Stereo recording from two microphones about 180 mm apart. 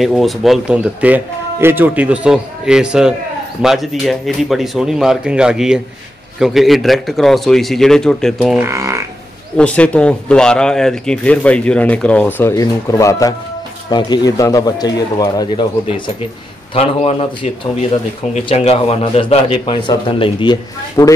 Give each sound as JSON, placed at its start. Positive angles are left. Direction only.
{"t": 0.0, "sound": "speech", "side_deg": 0}
{"t": 8.5, "sound": "speech", "side_deg": -15}
{"t": 9.6, "sound": "a man's voice", "side_deg": 5}